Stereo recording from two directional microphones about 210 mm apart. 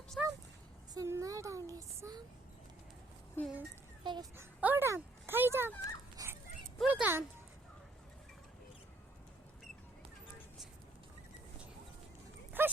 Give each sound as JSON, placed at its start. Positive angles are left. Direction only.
{"t": 0.2, "sound": "a sound", "side_deg": 0}
{"t": 0.9, "sound": "female singing", "side_deg": -15}
{"t": 3.4, "sound": "speech", "side_deg": 10}
{"t": 4.0, "sound": "speech", "side_deg": -20}
{"t": 6.2, "sound": "dog", "side_deg": -15}
{"t": 6.7, "sound": "a sound", "side_deg": -5}
{"t": 12.6, "sound": "dog", "side_deg": -10}